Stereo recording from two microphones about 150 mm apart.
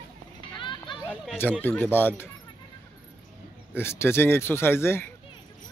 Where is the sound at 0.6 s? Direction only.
35° left (ahead or behind).